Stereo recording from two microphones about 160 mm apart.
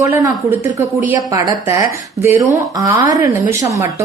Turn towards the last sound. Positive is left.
turn(degrees=-20)  # may be behind; listen again after turning